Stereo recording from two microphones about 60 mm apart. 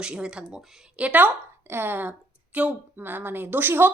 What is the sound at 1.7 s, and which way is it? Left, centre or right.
A woman's voice, right.